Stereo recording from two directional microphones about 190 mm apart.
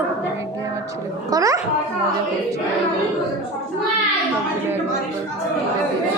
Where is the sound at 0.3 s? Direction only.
15° right (ahead or behind).